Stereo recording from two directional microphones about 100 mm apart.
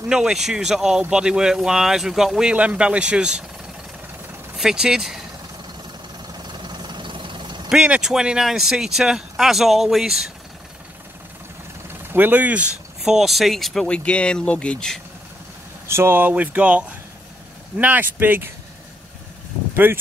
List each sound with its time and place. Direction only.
0.1 s a man's voice: 5° right (ahead or behind)
4.6 s speech: 5° right (ahead or behind)
6.3 s vehicle: 45° right (ahead or behind)
7.7 s speech: 10° right (ahead or behind)
12.1 s speech: 20° right (ahead or behind); by 15.0 s 10° left (ahead or behind)
15.9 s a man's voice: 25° right (ahead or behind)
19.7 s speech: 25° right (ahead or behind)